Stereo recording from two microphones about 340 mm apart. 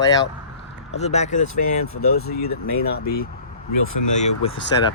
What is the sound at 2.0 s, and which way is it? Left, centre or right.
Speech, left.